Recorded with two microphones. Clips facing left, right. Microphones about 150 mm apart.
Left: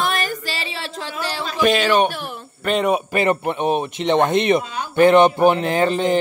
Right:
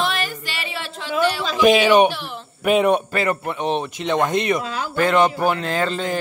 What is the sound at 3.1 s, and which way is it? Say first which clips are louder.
Speech: left 3 dB; 20° left (ahead or behind).